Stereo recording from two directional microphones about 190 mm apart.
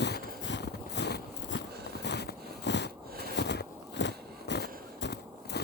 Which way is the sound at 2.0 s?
60° left (ahead or behind).